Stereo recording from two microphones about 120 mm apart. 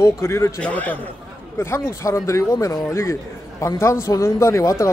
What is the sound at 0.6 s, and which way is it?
A man's voice, 15° left (ahead or behind).